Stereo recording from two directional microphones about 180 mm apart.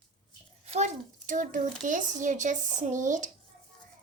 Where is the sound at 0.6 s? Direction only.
40° right (ahead or behind).